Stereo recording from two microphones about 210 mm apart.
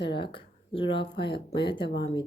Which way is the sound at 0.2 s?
25° left (ahead or behind).